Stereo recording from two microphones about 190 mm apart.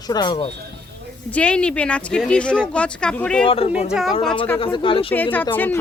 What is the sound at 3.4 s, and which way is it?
Speech, 30° left (ahead or behind).